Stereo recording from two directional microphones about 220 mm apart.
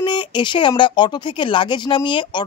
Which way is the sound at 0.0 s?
20° left (ahead or behind).